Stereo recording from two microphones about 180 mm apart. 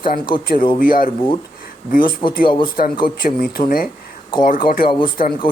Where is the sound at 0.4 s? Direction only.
55° left (ahead or behind).